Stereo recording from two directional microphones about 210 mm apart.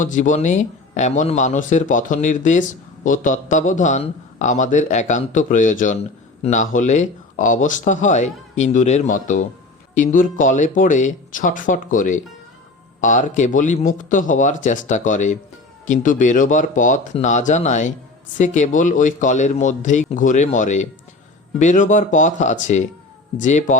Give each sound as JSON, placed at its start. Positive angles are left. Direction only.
{"t": 0.0, "sound": "a man's voice", "side_deg": 35}